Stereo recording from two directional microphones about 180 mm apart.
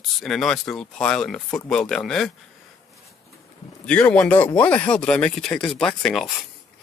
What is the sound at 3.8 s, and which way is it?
Speech, 5° left (ahead or behind).